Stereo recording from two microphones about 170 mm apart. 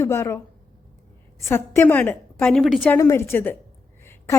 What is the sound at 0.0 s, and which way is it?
Speech, 15° left (ahead or behind).